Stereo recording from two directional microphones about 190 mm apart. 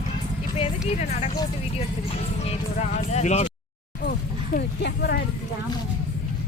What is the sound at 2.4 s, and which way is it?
Speech, 35° left (ahead or behind).